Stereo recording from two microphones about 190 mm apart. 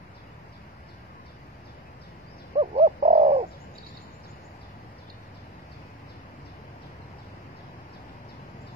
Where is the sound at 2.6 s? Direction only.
35° right (ahead or behind).